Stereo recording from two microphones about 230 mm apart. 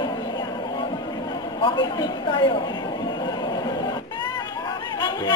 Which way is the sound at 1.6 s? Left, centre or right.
Left.